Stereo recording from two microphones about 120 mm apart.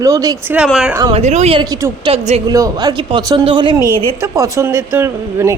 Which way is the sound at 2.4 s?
30° right (ahead or behind).